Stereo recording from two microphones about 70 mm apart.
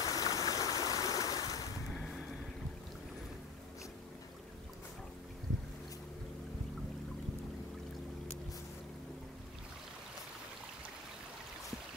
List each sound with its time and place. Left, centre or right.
0.0 s stream: left
2.0 s vehicle: centre